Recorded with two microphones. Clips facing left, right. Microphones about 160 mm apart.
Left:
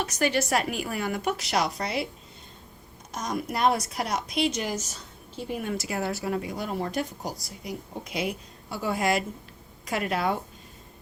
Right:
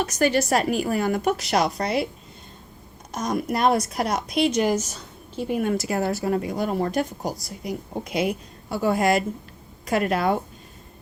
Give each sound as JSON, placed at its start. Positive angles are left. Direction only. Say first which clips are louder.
{"t": 0.0, "sound": "a woman's voice", "louder": "right 5 dB", "side_deg": -45}
{"t": 3.1, "sound": "a woman's voice", "louder": "right 5 dB", "side_deg": -50}